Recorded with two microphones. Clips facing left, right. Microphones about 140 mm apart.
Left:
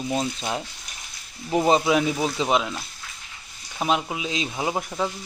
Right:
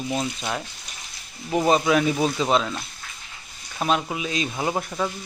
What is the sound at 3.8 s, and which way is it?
Speech, 10° left (ahead or behind).